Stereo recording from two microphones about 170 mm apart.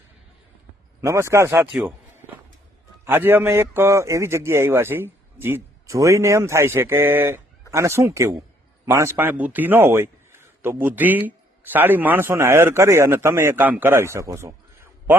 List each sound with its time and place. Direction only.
1.0 s a man's voice: 15° right (ahead or behind)
3.0 s a man's voice: 10° right (ahead or behind)